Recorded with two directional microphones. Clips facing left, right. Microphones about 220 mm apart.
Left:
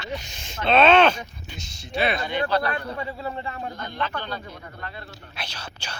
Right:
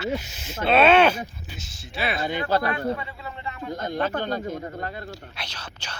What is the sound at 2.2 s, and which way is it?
Speech, 45° right (ahead or behind).